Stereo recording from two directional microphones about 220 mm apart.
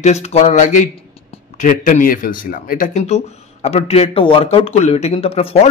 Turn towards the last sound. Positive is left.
turn(degrees=25)  # may be behind; listen again after turning